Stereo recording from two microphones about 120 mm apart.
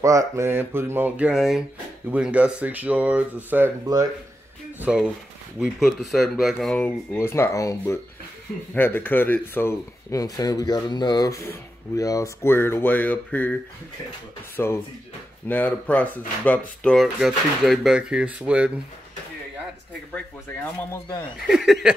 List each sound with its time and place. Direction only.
0.0 s speech: 25° right (ahead or behind)
1.3 s speech: centre (ahead or behind)
3.8 s speech: 30° right (ahead or behind)
4.9 s speech: 10° right (ahead or behind); by 7.2 s 10° left (ahead or behind)
7.2 s speech: 20° left (ahead or behind)
14.6 s speech: 20° left (ahead or behind)
16.9 s speech: centre (ahead or behind)
21.5 s speech: 5° right (ahead or behind)